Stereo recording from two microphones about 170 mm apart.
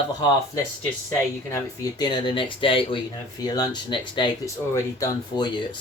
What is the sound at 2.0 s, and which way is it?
Speech, 25° left (ahead or behind).